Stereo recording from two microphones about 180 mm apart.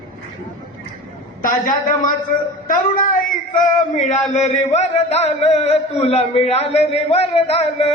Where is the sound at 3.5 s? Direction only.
40° left (ahead or behind).